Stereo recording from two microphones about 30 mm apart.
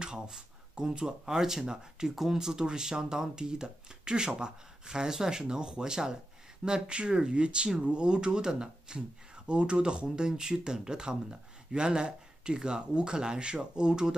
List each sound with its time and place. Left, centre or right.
0.7 s speech: right